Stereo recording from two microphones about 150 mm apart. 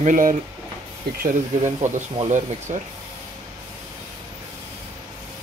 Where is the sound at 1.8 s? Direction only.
55° right (ahead or behind).